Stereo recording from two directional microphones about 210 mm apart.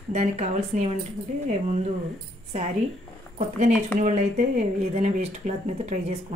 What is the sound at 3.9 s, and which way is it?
Speech, 35° right (ahead or behind).